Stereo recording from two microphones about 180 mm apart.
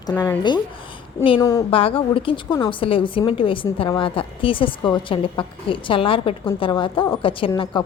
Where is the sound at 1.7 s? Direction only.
30° left (ahead or behind).